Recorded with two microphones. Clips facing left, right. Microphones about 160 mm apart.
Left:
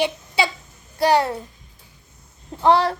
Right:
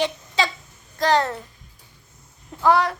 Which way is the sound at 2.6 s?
30° left (ahead or behind).